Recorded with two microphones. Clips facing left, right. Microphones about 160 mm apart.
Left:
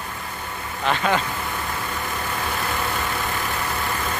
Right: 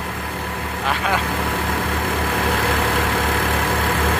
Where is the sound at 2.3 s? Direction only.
90° right.